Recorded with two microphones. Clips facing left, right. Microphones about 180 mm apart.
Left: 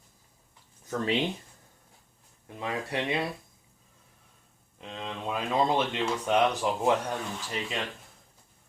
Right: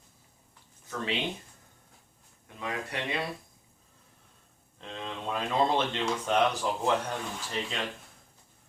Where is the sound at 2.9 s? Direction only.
20° left (ahead or behind).